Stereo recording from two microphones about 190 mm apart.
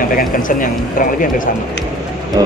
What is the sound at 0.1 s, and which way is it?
Speech, 45° left (ahead or behind).